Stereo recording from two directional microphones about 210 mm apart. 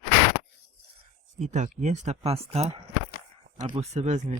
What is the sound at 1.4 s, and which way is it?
Speech, 35° right (ahead or behind).